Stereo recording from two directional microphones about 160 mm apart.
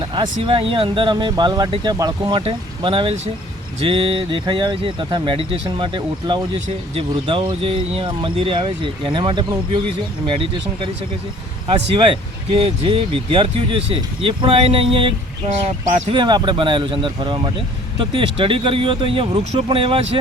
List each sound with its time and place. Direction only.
0.1 s speech: 30° right (ahead or behind)